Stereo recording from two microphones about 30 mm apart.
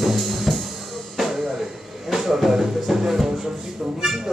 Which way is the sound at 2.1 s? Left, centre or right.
Centre.